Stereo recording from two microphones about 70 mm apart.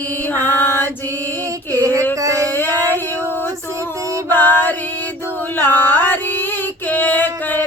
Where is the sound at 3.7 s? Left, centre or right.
Right.